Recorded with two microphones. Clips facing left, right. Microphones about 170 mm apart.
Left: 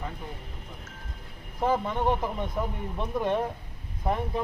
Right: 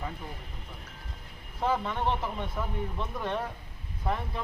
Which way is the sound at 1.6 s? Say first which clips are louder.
Left 3 dB; 15° left (ahead or behind).